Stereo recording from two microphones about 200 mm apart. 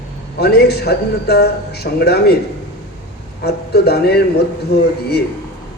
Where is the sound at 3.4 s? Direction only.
55° left (ahead or behind).